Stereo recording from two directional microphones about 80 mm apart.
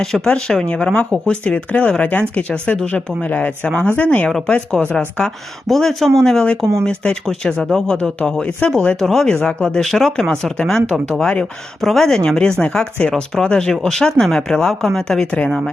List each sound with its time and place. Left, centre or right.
0.0 s speech: centre
4.3 s a woman's voice: centre